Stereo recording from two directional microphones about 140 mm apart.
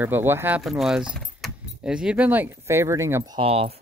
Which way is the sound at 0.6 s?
Centre (ahead or behind).